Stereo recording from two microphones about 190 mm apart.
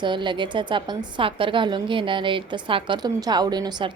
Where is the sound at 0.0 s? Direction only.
25° right (ahead or behind).